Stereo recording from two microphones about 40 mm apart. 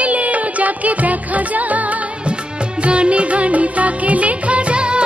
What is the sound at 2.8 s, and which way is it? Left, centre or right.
Music, right.